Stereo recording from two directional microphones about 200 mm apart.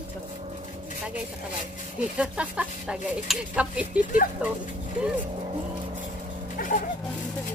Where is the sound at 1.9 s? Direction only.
5° right (ahead or behind).